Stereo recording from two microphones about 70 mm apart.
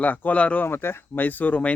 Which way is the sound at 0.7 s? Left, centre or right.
Left.